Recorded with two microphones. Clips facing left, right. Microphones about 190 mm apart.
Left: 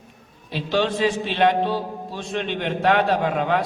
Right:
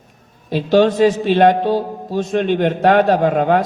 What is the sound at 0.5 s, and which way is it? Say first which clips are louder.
A man's voice: right 9 dB; 45° right (ahead or behind).